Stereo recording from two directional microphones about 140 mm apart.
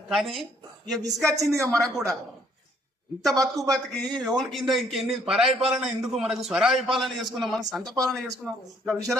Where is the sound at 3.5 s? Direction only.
Centre (ahead or behind).